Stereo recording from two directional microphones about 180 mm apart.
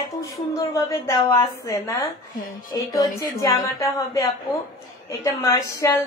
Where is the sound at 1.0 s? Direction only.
20° left (ahead or behind).